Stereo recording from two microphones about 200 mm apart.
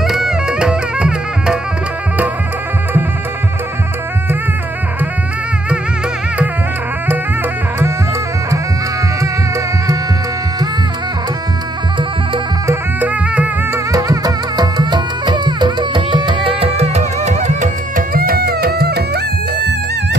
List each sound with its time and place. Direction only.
0.0 s music: centre (ahead or behind)
12.6 s music: 10° right (ahead or behind); by 19.2 s 55° right (ahead or behind)